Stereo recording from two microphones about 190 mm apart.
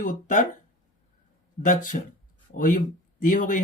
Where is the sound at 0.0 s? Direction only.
40° left (ahead or behind).